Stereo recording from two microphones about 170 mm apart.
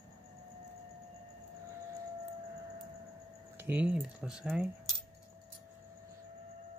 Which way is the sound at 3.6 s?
10° right (ahead or behind).